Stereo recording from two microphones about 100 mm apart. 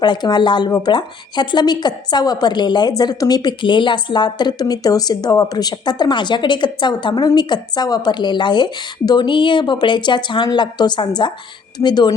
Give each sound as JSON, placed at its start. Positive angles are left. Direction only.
{"t": 0.0, "sound": "a woman's voice", "side_deg": 45}